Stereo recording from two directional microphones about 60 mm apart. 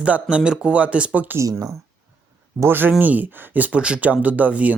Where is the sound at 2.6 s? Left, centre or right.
Right.